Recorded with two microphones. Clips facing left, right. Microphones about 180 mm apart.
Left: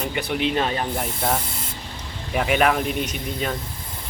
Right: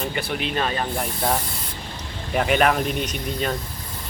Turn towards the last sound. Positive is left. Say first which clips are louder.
# right 1 dB
turn(degrees=5)  # may be behind; listen again after turning